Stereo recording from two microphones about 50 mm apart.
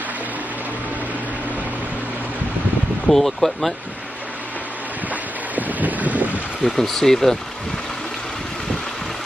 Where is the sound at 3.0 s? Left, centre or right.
Centre.